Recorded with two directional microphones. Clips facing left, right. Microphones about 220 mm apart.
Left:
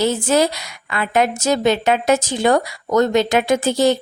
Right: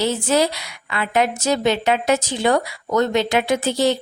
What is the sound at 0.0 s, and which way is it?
A woman's voice, 45° left (ahead or behind).